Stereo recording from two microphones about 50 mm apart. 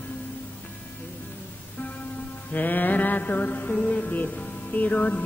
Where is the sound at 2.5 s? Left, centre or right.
Left.